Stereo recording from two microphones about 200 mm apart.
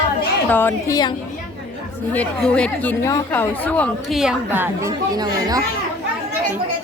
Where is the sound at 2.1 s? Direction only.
5° left (ahead or behind); by 5.6 s 20° right (ahead or behind).